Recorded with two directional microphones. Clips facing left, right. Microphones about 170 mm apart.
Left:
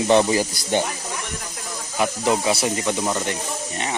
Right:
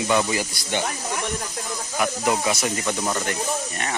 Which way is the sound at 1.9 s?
25° left (ahead or behind).